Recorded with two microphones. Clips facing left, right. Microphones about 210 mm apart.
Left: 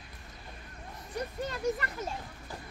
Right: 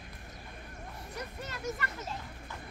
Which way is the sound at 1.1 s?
30° left (ahead or behind).